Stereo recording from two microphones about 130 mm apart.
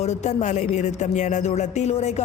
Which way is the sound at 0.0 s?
60° left (ahead or behind).